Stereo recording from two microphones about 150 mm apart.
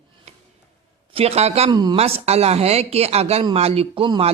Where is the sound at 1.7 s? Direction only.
30° right (ahead or behind).